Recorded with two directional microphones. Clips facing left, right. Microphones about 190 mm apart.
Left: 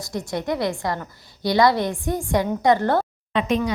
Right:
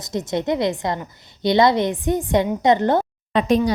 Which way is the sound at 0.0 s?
20° right (ahead or behind).